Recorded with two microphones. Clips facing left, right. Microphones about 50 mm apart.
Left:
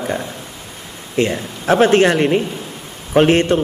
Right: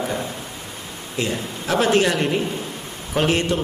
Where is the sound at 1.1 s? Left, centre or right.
Left.